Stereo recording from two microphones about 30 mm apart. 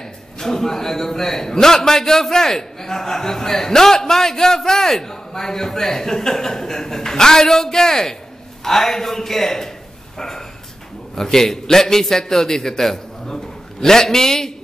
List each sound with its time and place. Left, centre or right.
0.0 s a man's voice: centre